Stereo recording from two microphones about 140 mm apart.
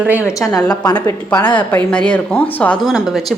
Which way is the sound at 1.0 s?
20° left (ahead or behind).